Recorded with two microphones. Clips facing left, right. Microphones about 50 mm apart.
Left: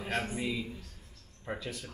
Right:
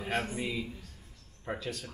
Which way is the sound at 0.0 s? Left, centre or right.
Centre.